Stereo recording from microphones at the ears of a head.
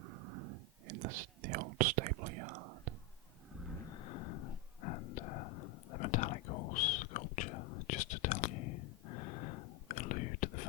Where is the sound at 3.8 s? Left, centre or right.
Left.